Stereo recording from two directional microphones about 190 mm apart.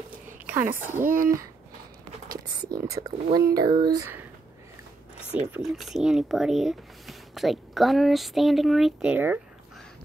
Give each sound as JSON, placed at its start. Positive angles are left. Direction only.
{"t": 0.5, "sound": "a woman's voice", "side_deg": -10}
{"t": 1.0, "sound": "speech", "side_deg": -45}
{"t": 2.9, "sound": "speech", "side_deg": -20}
{"t": 5.5, "sound": "speech", "side_deg": 0}